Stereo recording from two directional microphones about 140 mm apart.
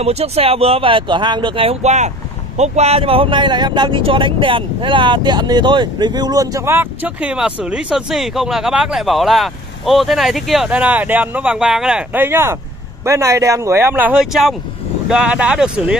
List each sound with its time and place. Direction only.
0.0 s speech: 45° right (ahead or behind); by 16.0 s 5° right (ahead or behind)